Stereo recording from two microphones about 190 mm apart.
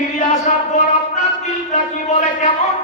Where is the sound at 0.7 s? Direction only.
40° left (ahead or behind).